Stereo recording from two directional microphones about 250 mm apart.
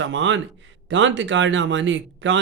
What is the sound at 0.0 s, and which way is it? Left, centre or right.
Speech, right.